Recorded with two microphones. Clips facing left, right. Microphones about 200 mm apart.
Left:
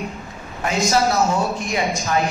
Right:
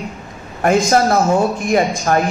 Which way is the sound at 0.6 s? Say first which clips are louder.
Right 6 dB; 50° right (ahead or behind).